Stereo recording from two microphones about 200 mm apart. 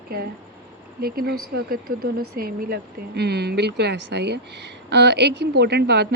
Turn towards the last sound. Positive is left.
turn(degrees=-55)  # may be behind; listen again after turning